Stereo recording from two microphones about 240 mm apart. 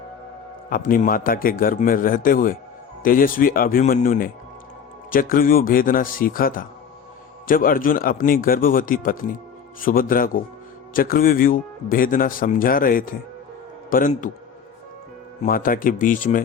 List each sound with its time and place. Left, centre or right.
0.7 s speech: left
15.4 s speech: left